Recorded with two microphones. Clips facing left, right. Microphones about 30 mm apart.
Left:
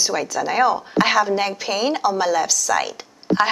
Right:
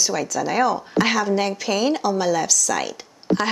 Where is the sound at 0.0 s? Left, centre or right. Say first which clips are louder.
Left 1 dB; centre.